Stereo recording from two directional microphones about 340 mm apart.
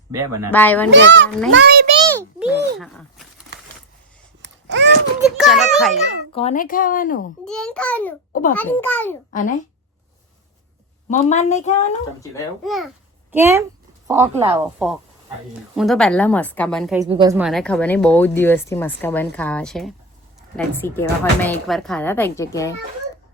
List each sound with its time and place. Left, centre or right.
0.5 s speech: centre
0.9 s a child's voice: right
2.1 s a sound: centre
2.7 s speech: centre
4.4 s a sound: right
5.2 s a child's voice: centre
6.3 s speech: centre
7.4 s speech: centre
8.3 s a sound: left
8.5 s speech: centre
9.3 s speech: left
11.1 s speech: centre
12.2 s speech: centre
17.0 s speech: centre